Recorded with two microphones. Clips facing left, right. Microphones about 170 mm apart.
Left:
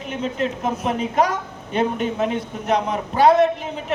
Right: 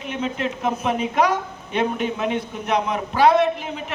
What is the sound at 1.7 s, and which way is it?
Speech, 35° left (ahead or behind).